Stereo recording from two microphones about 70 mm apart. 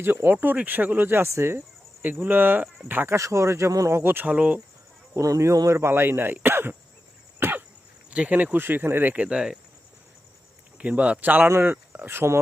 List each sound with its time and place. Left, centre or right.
0.0 s speech: right
3.2 s speech: right
4.0 s speech: right
5.2 s speech: right
5.6 s speech: right
7.3 s cough: right
8.1 s speech: centre
8.5 s speech: right; by 9.6 s centre
10.8 s speech: centre; by 12.4 s right